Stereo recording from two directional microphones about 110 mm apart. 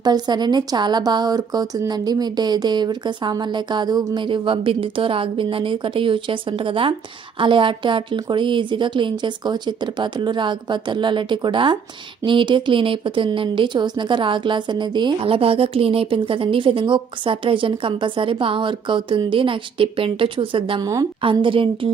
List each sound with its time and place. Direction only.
0.0 s speech: 40° right (ahead or behind)
20.8 s a woman's voice: 35° right (ahead or behind)
21.2 s speech: 55° right (ahead or behind)